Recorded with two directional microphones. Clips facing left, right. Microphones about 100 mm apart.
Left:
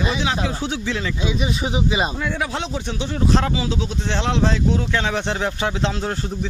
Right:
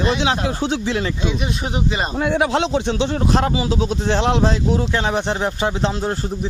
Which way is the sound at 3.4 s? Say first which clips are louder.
Right 4 dB; 35° right (ahead or behind).